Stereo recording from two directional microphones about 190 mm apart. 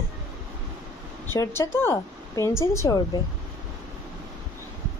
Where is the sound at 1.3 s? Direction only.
15° left (ahead or behind).